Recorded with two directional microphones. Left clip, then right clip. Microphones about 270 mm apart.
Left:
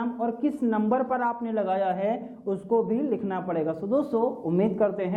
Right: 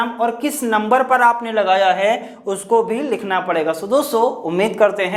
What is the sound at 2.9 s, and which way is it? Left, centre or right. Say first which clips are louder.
A man's voice: right 8 dB; centre.